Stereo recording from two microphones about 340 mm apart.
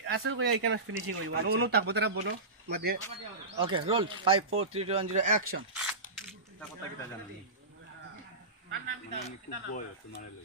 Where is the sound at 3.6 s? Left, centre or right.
Centre.